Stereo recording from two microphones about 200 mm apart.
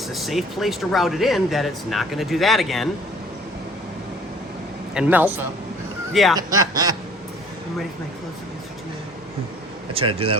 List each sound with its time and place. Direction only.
0.1 s speech: centre (ahead or behind)
4.9 s a man's voice: 5° right (ahead or behind)
6.3 s speech: 20° right (ahead or behind)
9.9 s speech: 30° right (ahead or behind)